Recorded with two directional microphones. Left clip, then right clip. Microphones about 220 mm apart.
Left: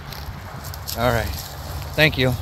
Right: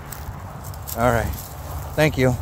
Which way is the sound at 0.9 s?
15° right (ahead or behind).